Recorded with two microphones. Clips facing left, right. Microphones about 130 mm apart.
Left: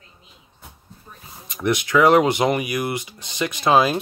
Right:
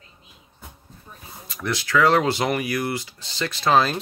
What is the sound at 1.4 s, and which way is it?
Speech, 20° left (ahead or behind).